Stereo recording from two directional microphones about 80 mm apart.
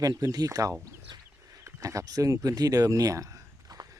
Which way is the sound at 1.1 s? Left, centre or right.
Right.